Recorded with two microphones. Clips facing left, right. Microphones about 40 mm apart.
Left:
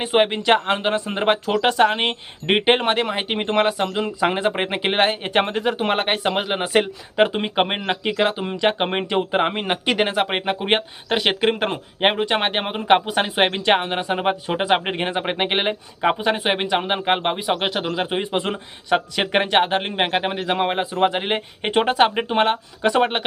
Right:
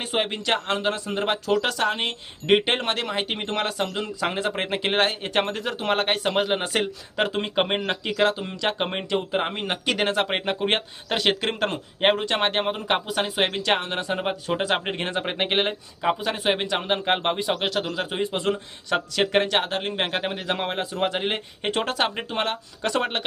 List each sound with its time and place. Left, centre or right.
0.0 s speech: centre
16.0 s speech: left